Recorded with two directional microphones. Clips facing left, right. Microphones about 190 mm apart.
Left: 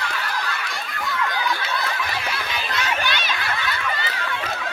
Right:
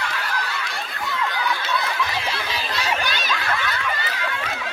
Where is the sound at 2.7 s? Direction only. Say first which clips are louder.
Left 1 dB; 35° right (ahead or behind).